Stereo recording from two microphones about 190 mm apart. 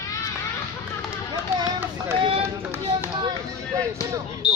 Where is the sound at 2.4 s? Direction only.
15° right (ahead or behind).